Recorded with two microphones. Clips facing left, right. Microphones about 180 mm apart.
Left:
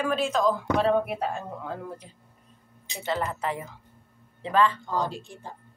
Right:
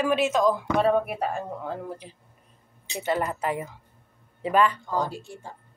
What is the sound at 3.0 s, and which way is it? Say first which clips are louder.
Speech: right 2 dB; 15° right (ahead or behind).